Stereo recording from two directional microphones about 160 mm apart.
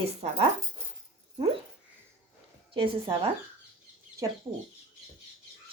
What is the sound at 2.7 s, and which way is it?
Speech, 30° right (ahead or behind).